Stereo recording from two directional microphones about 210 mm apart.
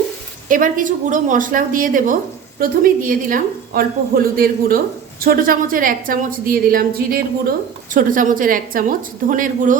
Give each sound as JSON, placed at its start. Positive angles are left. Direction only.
{"t": 0.4, "sound": "a woman's voice", "side_deg": -40}